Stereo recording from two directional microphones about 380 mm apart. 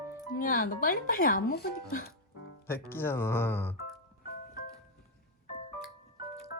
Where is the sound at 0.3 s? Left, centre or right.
Left.